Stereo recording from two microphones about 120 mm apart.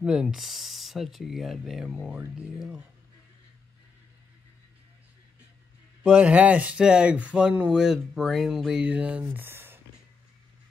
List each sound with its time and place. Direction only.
0.0 s speech: 5° right (ahead or behind)
6.0 s speech: 10° right (ahead or behind)